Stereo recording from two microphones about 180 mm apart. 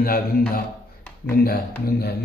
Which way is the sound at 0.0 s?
55° left (ahead or behind).